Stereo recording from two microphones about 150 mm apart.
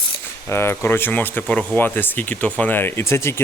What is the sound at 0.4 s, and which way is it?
Speech, 15° left (ahead or behind).